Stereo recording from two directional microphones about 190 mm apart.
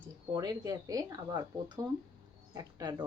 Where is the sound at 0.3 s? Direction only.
20° right (ahead or behind).